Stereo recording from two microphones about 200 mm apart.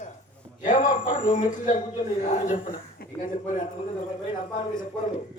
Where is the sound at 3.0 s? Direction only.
50° left (ahead or behind).